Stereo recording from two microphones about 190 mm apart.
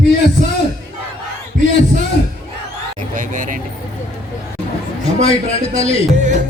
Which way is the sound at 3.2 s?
45° right (ahead or behind).